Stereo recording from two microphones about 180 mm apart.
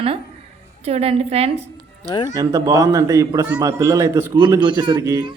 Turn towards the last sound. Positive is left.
turn(degrees=-20)  # may be behind; listen again after turning